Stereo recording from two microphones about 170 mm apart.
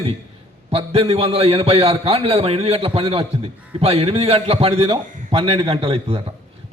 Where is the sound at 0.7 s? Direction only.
35° right (ahead or behind).